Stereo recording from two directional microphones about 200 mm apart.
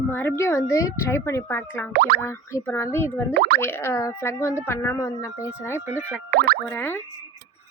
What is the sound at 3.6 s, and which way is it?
Speech, 10° left (ahead or behind).